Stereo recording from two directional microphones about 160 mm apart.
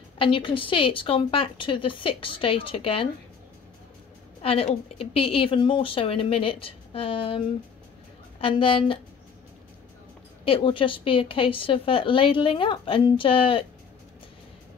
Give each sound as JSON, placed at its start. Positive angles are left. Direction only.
{"t": 0.2, "sound": "speech", "side_deg": 30}
{"t": 4.4, "sound": "speech", "side_deg": 35}
{"t": 10.4, "sound": "speech", "side_deg": 35}